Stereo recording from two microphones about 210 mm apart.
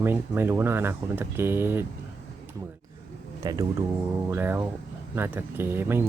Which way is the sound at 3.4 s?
15° right (ahead or behind).